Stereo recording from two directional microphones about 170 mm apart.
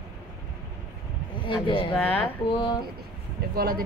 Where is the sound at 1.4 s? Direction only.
30° left (ahead or behind).